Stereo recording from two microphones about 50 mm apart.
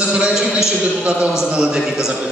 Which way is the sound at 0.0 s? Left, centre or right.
Right.